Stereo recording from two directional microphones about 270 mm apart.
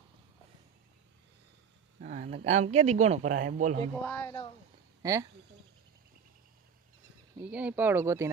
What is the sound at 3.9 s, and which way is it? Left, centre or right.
Speech, centre.